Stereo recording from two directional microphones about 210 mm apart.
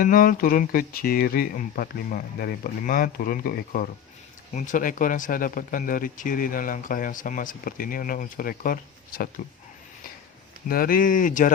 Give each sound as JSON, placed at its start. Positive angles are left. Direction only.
{"t": 0.0, "sound": "speech", "side_deg": 40}
{"t": 10.7, "sound": "speech", "side_deg": 45}